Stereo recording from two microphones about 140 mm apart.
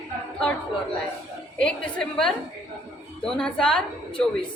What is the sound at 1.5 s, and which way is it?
A woman's voice, 5° left (ahead or behind).